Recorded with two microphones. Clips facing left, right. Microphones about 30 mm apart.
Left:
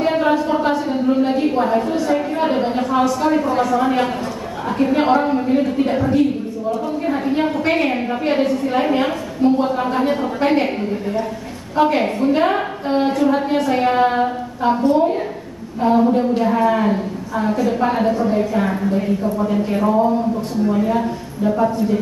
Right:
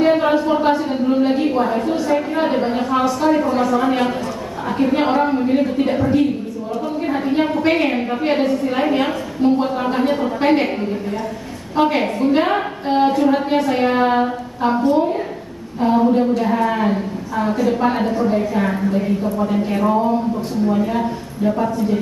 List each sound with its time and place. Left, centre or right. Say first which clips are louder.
0.0 s a sound: right 2 dB; centre
2.4 s a woman's voice: even; centre
14.8 s a woman's voice: left 1 dB; left
15.8 s a woman's voice: even; centre